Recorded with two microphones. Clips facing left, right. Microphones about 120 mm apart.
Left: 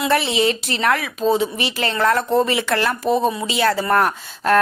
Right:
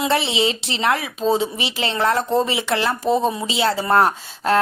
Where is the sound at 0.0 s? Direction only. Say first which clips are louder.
Left 2 dB; 25° right (ahead or behind).